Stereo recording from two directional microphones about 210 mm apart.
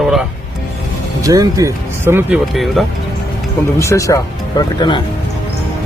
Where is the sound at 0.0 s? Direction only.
Centre (ahead or behind).